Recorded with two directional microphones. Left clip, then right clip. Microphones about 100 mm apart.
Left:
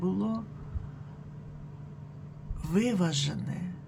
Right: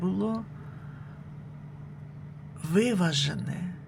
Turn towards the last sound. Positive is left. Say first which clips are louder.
# right 4 dB
turn(degrees=-5)  # may be behind; listen again after turning